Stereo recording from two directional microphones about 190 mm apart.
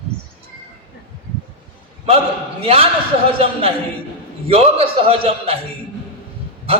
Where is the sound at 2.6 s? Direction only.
30° right (ahead or behind).